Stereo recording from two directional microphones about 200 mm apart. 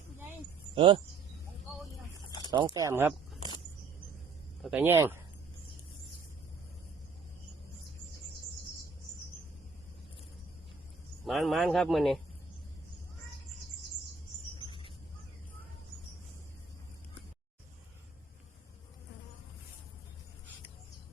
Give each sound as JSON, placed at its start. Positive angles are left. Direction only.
{"t": 0.8, "sound": "speech", "side_deg": -25}
{"t": 2.5, "sound": "speech", "side_deg": -20}
{"t": 4.6, "sound": "speech", "side_deg": -10}
{"t": 11.3, "sound": "speech", "side_deg": 0}
{"t": 14.6, "sound": "a sound", "side_deg": 25}